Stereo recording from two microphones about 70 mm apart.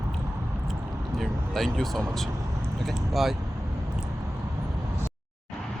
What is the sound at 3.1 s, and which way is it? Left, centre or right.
Speech, centre.